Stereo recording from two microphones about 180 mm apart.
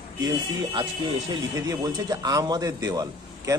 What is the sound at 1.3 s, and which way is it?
A man's voice, 20° right (ahead or behind).